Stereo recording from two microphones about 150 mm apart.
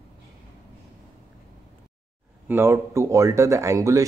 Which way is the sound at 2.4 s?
15° right (ahead or behind).